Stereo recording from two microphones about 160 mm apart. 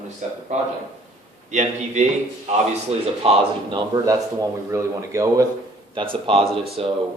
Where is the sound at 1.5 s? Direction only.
50° right (ahead or behind).